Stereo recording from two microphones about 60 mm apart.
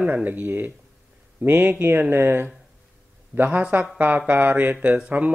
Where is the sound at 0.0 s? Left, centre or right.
Right.